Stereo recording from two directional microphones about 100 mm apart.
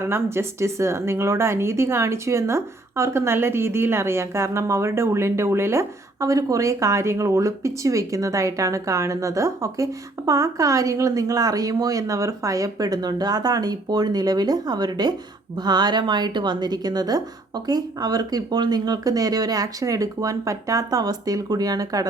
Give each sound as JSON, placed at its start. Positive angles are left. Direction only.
{"t": 0.0, "sound": "a woman's voice", "side_deg": -25}